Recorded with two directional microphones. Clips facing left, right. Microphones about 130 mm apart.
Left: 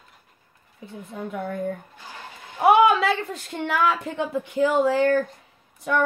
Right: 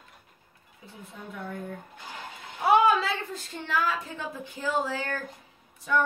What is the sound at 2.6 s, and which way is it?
A woman's voice, 70° left (ahead or behind).